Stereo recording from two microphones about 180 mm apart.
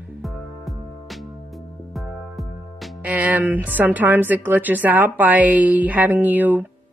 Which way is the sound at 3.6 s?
10° right (ahead or behind).